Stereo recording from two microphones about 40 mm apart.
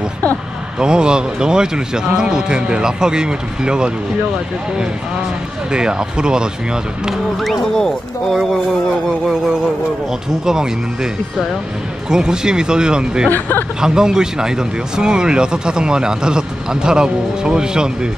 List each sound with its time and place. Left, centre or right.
0.7 s speech: right
5.7 s speech: right
7.7 s speech: centre
10.4 s speech: centre
12.1 s speech: centre
13.3 s speech: left
13.7 s speech: centre